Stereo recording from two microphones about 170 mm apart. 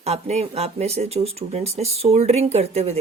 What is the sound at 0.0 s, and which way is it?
A woman's voice, 40° right (ahead or behind).